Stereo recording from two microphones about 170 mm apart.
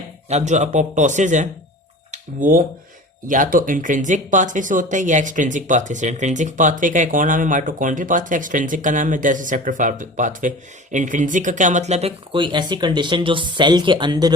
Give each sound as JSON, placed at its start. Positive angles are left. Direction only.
{"t": 0.3, "sound": "speech", "side_deg": -40}